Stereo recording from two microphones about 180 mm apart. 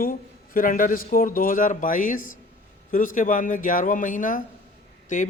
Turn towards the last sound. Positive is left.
turn(degrees=45)  # may be behind; listen again after turning